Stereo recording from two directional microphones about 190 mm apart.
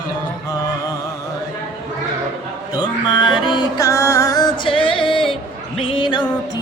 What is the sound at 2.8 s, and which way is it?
Music, 20° left (ahead or behind).